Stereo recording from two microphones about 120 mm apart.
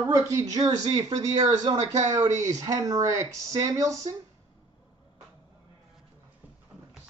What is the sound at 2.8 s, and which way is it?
A man's voice, 30° right (ahead or behind).